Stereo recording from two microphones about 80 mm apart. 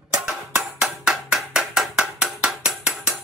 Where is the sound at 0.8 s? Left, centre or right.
Centre.